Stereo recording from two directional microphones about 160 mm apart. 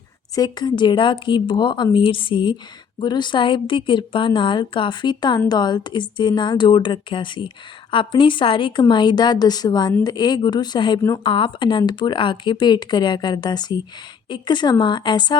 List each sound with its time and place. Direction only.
0.3 s speech: 25° left (ahead or behind)